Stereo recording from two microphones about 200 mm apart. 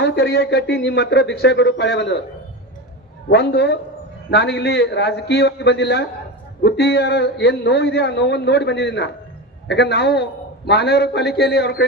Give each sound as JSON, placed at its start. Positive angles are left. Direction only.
{"t": 0.0, "sound": "speech", "side_deg": 60}
{"t": 3.2, "sound": "speech", "side_deg": 55}